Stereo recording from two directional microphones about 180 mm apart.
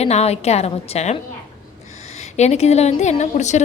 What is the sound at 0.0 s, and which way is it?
A woman's voice, 35° left (ahead or behind).